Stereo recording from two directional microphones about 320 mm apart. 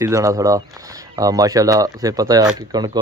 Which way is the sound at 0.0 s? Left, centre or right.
Centre.